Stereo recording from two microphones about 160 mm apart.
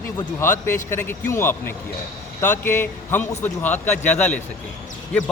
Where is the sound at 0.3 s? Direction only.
15° left (ahead or behind).